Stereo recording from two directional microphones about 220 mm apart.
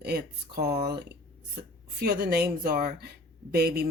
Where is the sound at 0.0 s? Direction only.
45° right (ahead or behind).